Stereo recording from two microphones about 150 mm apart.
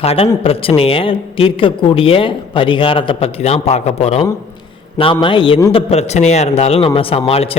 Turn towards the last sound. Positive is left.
turn(degrees=40)  # may be behind; listen again after turning